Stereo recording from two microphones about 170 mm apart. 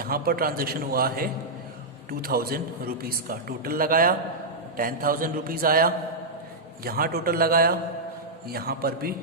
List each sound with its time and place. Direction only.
0.0 s a man's voice: 60° right (ahead or behind)